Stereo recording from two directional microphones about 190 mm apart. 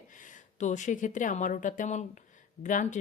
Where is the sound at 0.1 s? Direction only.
40° left (ahead or behind).